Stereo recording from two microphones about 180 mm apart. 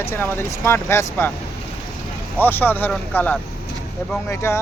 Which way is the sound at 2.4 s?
10° left (ahead or behind).